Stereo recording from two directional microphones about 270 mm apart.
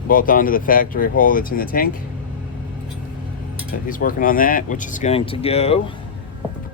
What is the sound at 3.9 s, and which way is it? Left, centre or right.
Speech, left.